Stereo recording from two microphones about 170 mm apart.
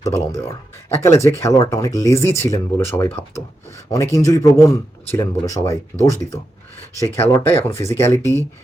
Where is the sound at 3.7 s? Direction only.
20° left (ahead or behind).